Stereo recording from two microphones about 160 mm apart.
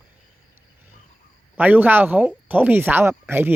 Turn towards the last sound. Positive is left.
turn(degrees=-15)  # may be behind; listen again after turning